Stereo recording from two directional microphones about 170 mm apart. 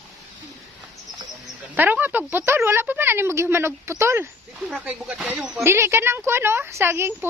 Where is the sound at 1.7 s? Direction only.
10° right (ahead or behind).